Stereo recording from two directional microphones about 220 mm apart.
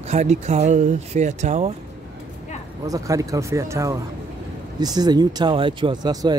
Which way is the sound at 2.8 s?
15° right (ahead or behind).